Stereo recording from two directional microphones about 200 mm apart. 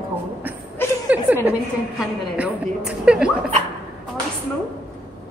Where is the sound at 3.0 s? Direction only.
5° right (ahead or behind).